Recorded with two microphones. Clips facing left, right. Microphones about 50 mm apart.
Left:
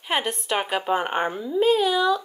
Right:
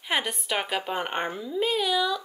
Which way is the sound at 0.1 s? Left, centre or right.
Centre.